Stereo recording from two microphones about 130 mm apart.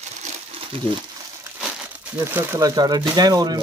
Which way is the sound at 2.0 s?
15° right (ahead or behind).